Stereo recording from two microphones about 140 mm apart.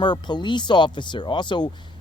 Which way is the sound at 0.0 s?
30° left (ahead or behind).